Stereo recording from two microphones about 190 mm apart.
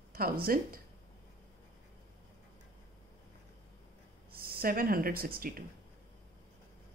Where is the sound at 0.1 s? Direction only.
50° right (ahead or behind).